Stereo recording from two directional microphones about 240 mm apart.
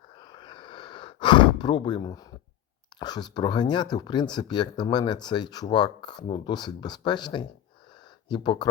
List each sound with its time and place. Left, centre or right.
0.2 s sigh: centre
3.0 s speech: centre